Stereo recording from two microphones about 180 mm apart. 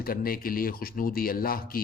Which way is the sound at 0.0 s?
55° left (ahead or behind).